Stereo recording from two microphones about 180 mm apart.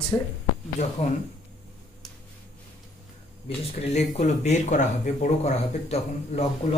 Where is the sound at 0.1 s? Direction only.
10° left (ahead or behind).